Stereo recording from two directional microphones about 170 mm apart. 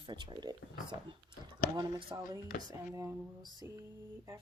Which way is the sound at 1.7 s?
30° right (ahead or behind).